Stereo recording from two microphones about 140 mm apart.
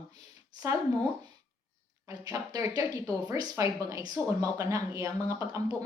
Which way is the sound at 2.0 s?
25° right (ahead or behind).